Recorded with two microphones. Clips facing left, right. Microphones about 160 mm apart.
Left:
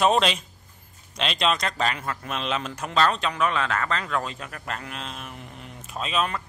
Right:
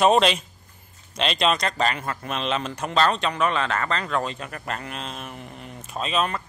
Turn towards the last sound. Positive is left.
turn(degrees=0)  # may be behind; listen again after turning